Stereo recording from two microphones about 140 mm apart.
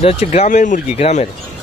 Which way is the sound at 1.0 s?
55° left (ahead or behind).